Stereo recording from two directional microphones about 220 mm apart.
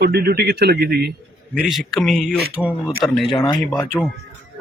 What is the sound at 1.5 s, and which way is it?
A man's voice, centre (ahead or behind).